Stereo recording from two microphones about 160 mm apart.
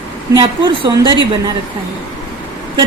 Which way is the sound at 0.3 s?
30° right (ahead or behind).